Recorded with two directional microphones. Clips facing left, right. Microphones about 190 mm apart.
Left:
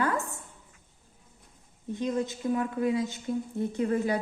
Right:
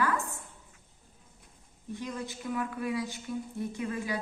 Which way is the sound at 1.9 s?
20° left (ahead or behind).